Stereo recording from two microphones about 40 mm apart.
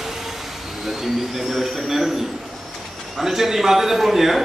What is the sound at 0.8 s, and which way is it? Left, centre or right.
Speech, centre.